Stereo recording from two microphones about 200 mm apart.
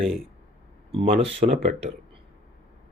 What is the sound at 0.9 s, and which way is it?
Speech, 30° right (ahead or behind).